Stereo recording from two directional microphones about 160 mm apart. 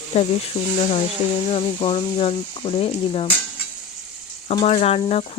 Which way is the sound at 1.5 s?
30° left (ahead or behind).